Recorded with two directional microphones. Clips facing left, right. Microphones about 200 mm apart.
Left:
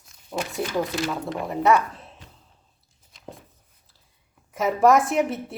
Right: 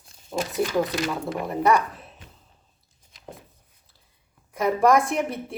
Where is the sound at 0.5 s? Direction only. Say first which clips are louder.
Right 3 dB; centre (ahead or behind).